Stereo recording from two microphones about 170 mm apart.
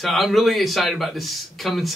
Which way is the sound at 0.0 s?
Centre (ahead or behind).